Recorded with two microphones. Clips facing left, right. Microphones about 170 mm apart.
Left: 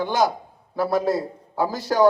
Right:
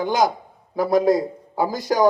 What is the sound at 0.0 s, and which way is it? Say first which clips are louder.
A man's voice: right 1 dB; 15° right (ahead or behind).